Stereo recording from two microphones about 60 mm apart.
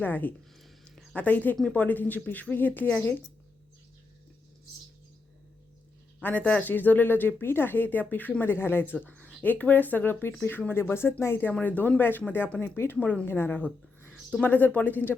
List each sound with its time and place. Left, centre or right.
0.0 s speech: left
6.2 s speech: left
8.4 s speech: left
9.0 s a sound: left
9.4 s speech: left
11.6 s speech: left